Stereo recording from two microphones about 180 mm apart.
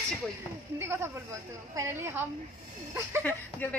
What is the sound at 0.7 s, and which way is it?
Speech, 15° right (ahead or behind).